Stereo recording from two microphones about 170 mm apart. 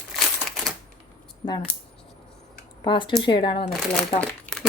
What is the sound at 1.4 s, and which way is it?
Speech, 30° left (ahead or behind).